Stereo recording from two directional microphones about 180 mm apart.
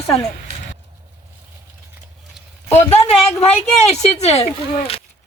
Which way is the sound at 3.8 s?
35° left (ahead or behind).